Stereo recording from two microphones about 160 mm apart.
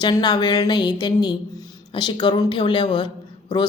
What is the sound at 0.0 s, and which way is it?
Speech, 25° left (ahead or behind).